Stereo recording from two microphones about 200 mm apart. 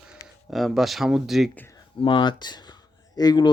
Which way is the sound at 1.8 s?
25° left (ahead or behind).